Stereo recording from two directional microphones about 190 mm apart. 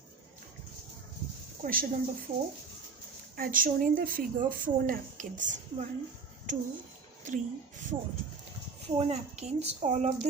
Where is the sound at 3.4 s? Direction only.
45° right (ahead or behind).